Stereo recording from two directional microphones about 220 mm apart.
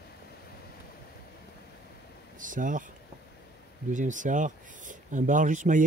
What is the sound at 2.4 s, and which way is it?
Speech, 35° right (ahead or behind).